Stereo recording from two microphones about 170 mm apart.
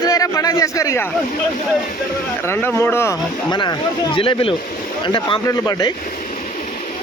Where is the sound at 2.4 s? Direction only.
15° left (ahead or behind).